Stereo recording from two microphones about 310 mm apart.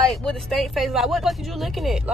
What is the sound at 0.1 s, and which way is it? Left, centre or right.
Speech, centre.